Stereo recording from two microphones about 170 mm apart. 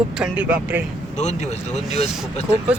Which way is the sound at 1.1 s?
45° left (ahead or behind).